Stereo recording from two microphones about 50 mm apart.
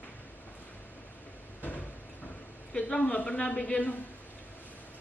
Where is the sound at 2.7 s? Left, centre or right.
Left.